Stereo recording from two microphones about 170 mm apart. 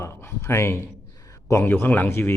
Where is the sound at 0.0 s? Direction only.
15° left (ahead or behind).